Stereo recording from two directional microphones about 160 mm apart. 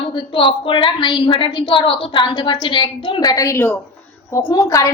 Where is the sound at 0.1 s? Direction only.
30° left (ahead or behind).